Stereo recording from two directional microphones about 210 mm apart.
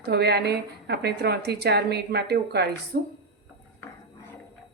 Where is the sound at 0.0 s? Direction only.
50° right (ahead or behind).